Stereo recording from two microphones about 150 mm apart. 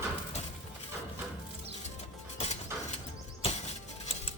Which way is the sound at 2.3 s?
45° left (ahead or behind).